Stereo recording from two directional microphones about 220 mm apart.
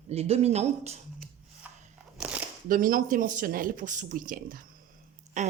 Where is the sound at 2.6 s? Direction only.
40° right (ahead or behind).